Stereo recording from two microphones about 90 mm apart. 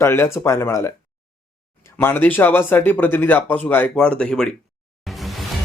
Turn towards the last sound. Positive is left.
turn(degrees=0)  # may be behind; listen again after turning